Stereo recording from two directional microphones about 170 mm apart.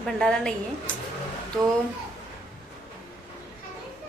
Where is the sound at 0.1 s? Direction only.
5° left (ahead or behind).